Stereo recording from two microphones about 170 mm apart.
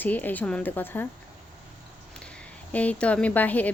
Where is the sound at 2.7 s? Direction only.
10° left (ahead or behind).